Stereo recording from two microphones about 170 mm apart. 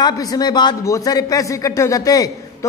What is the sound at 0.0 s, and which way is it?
A man's voice, 25° left (ahead or behind).